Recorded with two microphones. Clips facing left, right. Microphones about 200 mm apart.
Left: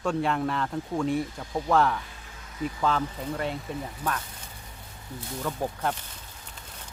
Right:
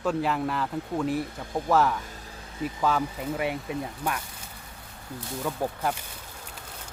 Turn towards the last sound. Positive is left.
turn(degrees=-10)  # may be behind; listen again after turning